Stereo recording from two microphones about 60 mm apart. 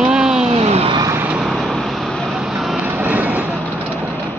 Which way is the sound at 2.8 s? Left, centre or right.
Right.